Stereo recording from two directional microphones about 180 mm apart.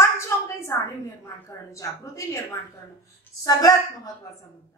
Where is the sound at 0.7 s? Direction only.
15° left (ahead or behind).